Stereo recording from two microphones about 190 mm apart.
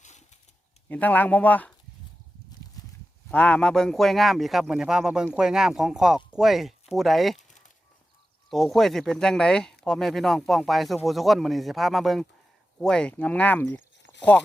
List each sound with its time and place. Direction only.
0.0 s a sound: 40° left (ahead or behind)
0.9 s speech: 10° left (ahead or behind)
3.2 s speech: 5° left (ahead or behind)
8.4 s speech: centre (ahead or behind)
14.0 s zipper: 70° left (ahead or behind)